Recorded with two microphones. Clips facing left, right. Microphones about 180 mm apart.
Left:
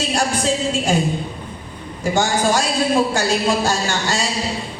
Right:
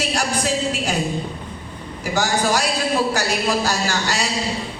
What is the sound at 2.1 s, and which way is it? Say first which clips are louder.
A man's voice: left 2 dB; 25° left (ahead or behind).